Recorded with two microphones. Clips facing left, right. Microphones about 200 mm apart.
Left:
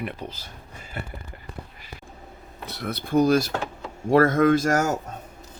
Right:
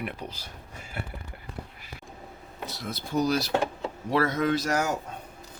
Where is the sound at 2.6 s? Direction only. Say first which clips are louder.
Left 4 dB; 60° left (ahead or behind).